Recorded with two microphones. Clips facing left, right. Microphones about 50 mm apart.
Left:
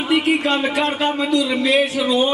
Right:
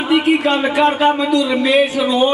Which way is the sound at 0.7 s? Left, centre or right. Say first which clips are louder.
Right 6 dB; centre.